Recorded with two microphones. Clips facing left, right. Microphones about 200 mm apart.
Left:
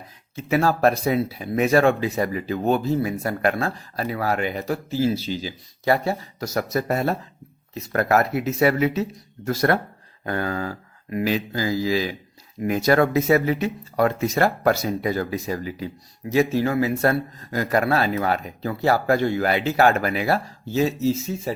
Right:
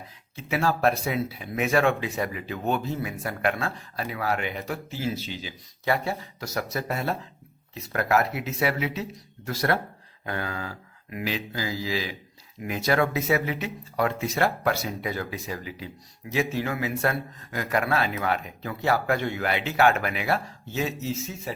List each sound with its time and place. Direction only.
0.3 s speech: 40° left (ahead or behind)